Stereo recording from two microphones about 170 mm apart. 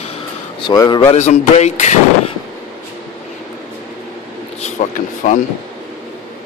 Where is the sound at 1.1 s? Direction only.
45° left (ahead or behind).